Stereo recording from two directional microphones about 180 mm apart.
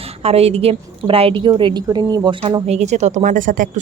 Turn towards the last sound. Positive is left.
turn(degrees=-45)  # may be behind; listen again after turning